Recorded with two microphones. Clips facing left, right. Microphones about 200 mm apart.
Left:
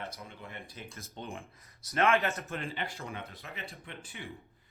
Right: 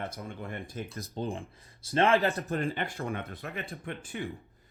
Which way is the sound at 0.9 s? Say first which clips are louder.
Right 7 dB; 35° right (ahead or behind).